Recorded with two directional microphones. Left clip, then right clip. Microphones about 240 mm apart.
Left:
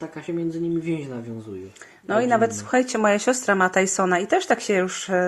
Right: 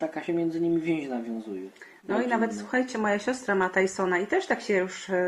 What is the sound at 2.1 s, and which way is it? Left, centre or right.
Speech, left.